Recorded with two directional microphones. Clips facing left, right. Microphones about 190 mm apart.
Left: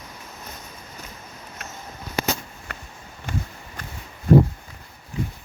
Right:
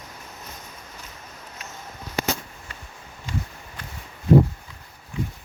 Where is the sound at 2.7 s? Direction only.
65° left (ahead or behind).